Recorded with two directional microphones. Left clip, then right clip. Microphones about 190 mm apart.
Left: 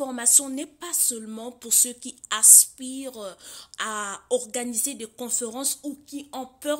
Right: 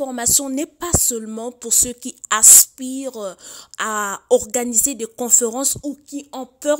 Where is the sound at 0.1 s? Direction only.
40° right (ahead or behind).